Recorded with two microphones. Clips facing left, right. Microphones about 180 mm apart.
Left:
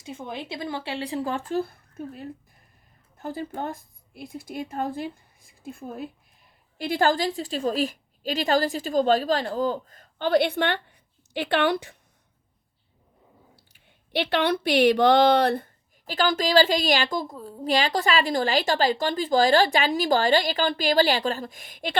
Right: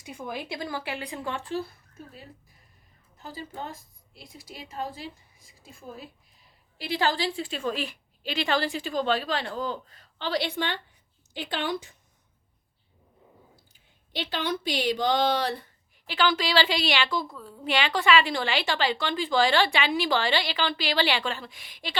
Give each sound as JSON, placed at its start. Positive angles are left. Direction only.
{"t": 0.0, "sound": "speech", "side_deg": 25}
{"t": 13.6, "sound": "speech", "side_deg": 65}